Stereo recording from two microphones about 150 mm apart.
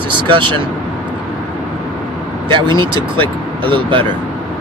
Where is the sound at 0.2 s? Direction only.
35° right (ahead or behind).